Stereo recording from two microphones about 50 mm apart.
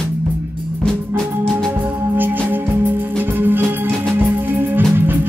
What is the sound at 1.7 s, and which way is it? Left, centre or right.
Music, right.